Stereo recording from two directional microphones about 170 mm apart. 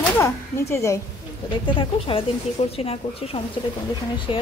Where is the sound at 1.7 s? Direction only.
30° left (ahead or behind).